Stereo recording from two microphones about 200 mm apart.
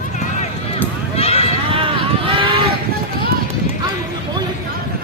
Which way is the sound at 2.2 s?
25° right (ahead or behind).